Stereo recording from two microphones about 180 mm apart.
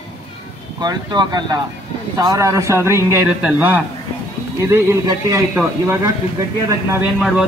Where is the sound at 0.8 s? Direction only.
25° right (ahead or behind).